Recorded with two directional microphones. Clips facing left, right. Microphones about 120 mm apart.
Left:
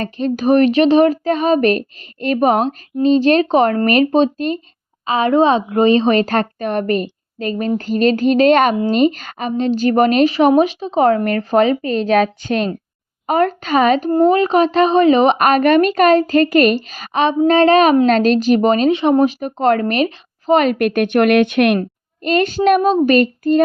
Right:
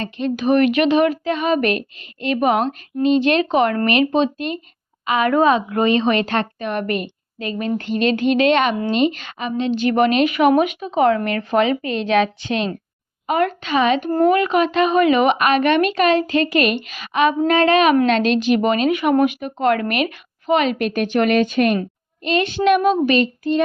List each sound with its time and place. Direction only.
0.0 s a woman's voice: 40° left (ahead or behind)
14.1 s a woman's voice: 25° left (ahead or behind); by 21.8 s 70° left (ahead or behind)
21.8 s a woman's voice: 45° left (ahead or behind)
23.1 s speech: 50° left (ahead or behind)